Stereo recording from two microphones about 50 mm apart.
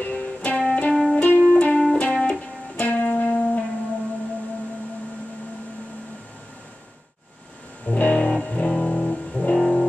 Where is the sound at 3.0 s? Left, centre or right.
Left.